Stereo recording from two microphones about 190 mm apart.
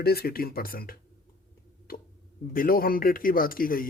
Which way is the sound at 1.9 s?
50° left (ahead or behind).